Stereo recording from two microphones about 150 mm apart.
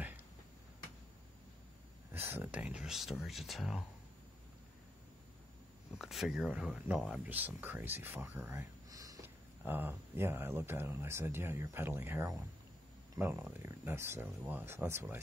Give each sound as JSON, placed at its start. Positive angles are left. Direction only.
{"t": 2.2, "sound": "speech", "side_deg": -10}
{"t": 5.9, "sound": "speech", "side_deg": 0}